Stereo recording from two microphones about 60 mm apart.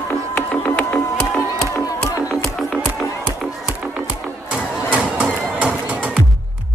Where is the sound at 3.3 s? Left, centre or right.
Centre.